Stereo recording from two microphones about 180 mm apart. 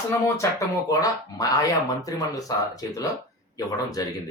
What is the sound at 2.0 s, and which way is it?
Speech, 20° left (ahead or behind).